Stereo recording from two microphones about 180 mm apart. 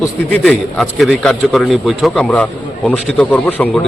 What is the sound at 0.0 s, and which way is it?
A man's voice, 10° left (ahead or behind).